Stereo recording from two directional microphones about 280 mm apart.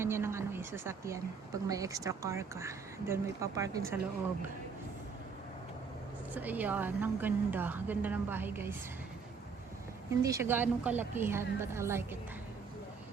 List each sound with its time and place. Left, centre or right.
0.0 s speech: centre
6.3 s speech: centre
10.2 s speech: centre